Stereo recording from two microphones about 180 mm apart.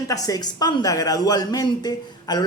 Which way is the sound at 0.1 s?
20° left (ahead or behind).